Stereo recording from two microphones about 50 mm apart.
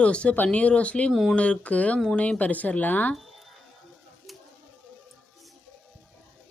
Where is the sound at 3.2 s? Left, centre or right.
Centre.